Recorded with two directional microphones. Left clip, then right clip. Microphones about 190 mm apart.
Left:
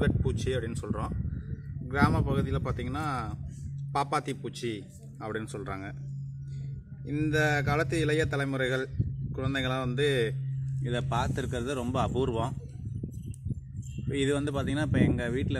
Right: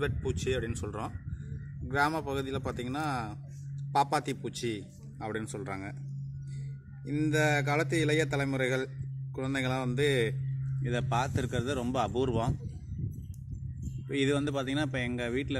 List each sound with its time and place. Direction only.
0.3 s a man's voice: 15° right (ahead or behind)
7.1 s a man's voice: 10° right (ahead or behind)
14.0 s a man's voice: 15° right (ahead or behind)